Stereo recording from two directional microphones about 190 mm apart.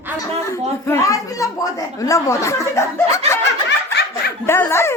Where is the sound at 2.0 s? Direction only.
15° left (ahead or behind).